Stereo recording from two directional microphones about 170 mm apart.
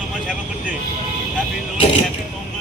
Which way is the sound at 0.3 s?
5° right (ahead or behind).